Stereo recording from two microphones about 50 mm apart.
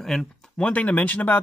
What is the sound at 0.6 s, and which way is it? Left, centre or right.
Speech, left.